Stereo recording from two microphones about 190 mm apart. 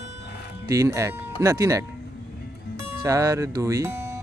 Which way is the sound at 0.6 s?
15° right (ahead or behind).